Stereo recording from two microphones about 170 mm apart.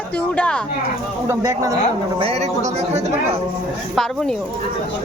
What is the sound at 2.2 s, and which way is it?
Speech, 40° right (ahead or behind).